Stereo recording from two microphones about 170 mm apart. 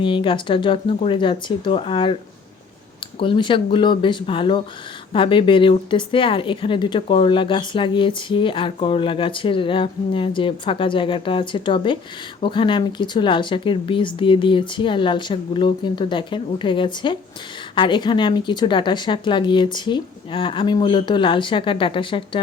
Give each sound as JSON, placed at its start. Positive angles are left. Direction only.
{"t": 0.0, "sound": "speech", "side_deg": 30}
{"t": 3.2, "sound": "speech", "side_deg": 30}